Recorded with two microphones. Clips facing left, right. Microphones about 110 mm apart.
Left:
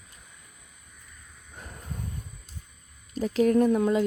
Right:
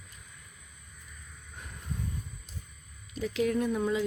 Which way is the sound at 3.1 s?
40° left (ahead or behind).